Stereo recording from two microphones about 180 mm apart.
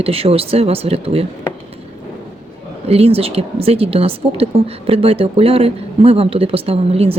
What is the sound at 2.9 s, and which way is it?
Speech, 35° right (ahead or behind).